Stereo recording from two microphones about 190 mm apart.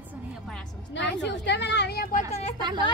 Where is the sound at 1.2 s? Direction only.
65° left (ahead or behind).